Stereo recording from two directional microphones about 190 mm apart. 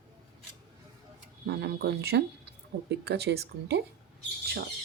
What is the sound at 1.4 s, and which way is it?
Speech, 65° right (ahead or behind).